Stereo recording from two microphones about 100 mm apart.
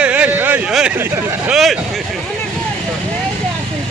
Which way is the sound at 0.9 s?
25° right (ahead or behind).